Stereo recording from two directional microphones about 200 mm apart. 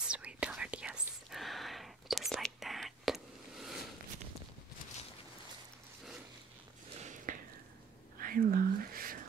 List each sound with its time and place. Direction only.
0.0 s whispering: 5° right (ahead or behind)
7.0 s a sound: 40° right (ahead or behind)
8.2 s whispering: 45° right (ahead or behind)